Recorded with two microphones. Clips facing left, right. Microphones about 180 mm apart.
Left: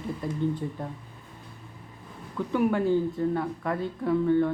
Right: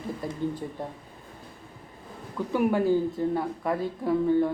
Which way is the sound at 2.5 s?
5° right (ahead or behind).